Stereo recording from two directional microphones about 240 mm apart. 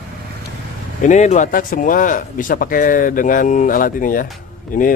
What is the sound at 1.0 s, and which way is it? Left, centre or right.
Speech, left.